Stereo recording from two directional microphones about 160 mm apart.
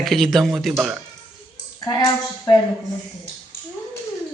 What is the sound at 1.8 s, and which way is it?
Speech, 25° left (ahead or behind).